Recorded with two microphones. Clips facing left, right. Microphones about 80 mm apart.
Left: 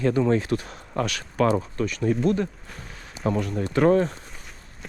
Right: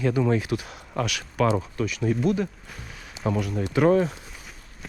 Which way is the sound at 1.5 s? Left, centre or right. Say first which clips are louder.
Left 1 dB; centre.